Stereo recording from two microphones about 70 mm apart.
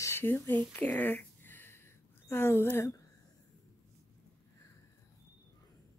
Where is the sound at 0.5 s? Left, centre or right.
Left.